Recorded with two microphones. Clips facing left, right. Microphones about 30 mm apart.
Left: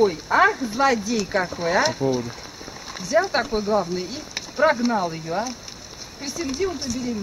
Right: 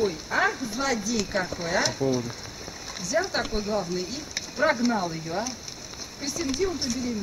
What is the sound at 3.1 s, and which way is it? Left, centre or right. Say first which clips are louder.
Speech: left 6 dB; left.